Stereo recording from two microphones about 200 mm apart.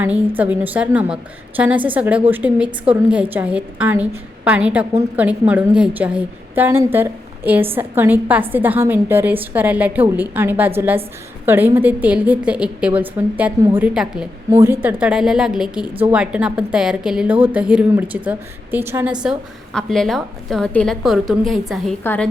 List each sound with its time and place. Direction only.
0.0 s a woman's voice: 10° right (ahead or behind); by 22.3 s 10° left (ahead or behind)